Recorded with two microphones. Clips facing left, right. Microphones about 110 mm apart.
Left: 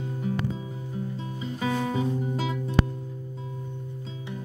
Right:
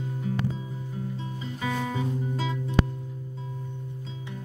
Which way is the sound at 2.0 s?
10° left (ahead or behind).